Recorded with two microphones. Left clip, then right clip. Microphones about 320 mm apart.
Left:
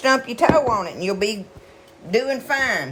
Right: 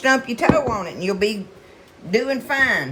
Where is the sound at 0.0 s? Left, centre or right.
Centre.